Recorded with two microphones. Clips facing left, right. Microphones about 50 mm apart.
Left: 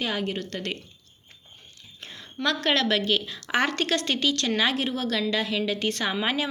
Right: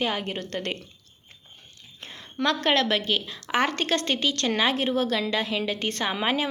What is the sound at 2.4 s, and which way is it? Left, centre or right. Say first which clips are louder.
A woman's voice: right 1 dB; centre.